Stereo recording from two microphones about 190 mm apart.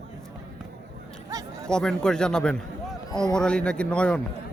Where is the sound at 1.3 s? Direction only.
20° right (ahead or behind).